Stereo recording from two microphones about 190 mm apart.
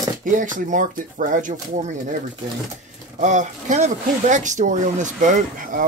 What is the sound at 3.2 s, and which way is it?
Speech, 40° right (ahead or behind).